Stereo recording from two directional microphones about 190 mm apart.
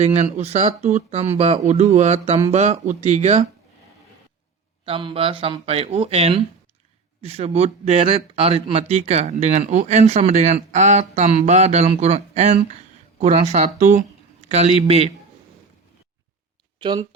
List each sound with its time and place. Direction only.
0.0 s speech: 35° right (ahead or behind)
4.9 s speech: 30° right (ahead or behind)
14.4 s a sound: 35° right (ahead or behind)
14.8 s speech: 30° right (ahead or behind)
16.7 s speech: 25° right (ahead or behind)